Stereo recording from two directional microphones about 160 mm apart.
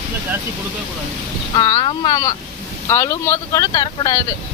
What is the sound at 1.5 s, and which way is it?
Speech, 25° left (ahead or behind).